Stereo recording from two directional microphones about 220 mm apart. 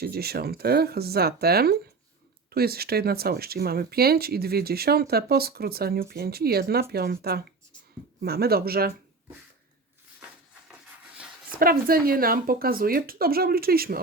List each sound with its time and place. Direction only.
0.0 s speech: 45° right (ahead or behind)
11.6 s speech: 40° right (ahead or behind)